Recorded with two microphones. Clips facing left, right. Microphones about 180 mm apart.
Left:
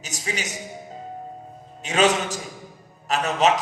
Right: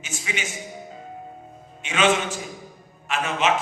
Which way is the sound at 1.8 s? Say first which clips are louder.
Left 1 dB; 40° left (ahead or behind).